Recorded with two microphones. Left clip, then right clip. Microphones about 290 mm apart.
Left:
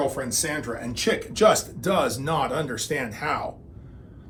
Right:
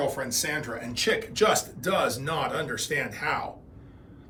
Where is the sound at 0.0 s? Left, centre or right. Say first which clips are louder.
Left 2 dB; left.